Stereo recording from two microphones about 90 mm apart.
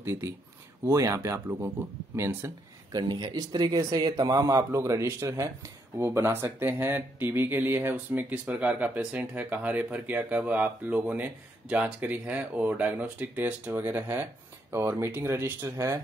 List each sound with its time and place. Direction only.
0.0 s speech: 30° right (ahead or behind)
2.9 s speech: 55° right (ahead or behind); by 16.0 s 35° right (ahead or behind)